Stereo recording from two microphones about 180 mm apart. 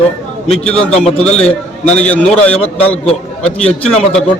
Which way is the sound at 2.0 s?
5° left (ahead or behind).